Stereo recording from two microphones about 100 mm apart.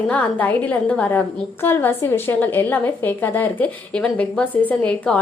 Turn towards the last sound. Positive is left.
turn(degrees=15)  # may be behind; listen again after turning